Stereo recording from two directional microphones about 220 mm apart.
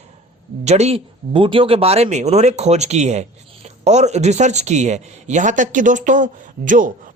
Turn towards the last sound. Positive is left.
turn(degrees=-35)  # may be behind; listen again after turning